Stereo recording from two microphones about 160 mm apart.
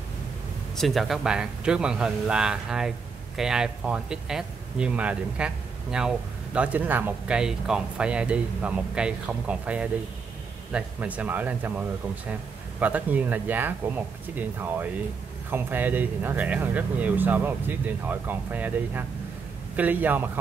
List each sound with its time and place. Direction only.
0.7 s speech: centre (ahead or behind)
12.8 s speech: 10° right (ahead or behind)